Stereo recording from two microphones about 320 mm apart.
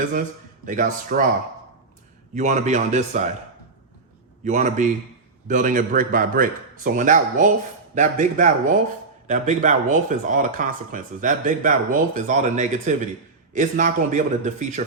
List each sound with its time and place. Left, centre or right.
0.6 s speech: right
2.3 s speech: right
4.4 s speech: right